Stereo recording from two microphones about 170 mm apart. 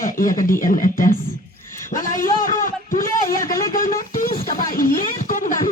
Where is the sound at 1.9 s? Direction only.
55° left (ahead or behind).